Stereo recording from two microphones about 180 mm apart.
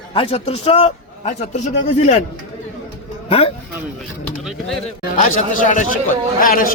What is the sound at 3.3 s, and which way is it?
Speech, 30° left (ahead or behind).